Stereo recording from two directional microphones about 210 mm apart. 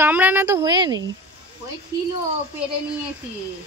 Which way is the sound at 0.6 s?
20° right (ahead or behind).